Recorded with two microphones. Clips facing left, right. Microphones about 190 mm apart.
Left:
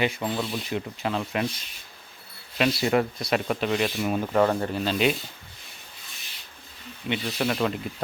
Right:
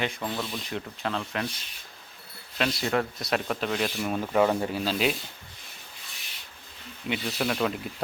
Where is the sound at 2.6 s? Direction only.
10° left (ahead or behind).